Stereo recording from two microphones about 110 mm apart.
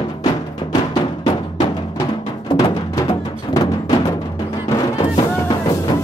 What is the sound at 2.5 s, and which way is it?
Music, 35° left (ahead or behind).